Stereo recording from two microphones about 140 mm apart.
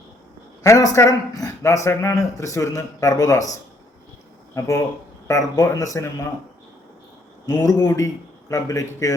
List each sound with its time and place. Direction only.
0.6 s speech: 20° left (ahead or behind)
4.5 s speech: 20° left (ahead or behind)
7.4 s speech: 25° left (ahead or behind)